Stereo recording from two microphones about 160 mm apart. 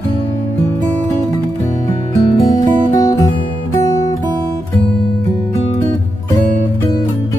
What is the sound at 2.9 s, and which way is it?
Music, 25° left (ahead or behind).